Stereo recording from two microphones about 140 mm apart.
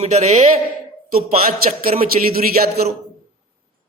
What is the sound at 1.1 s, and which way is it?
A man's voice, 90° right.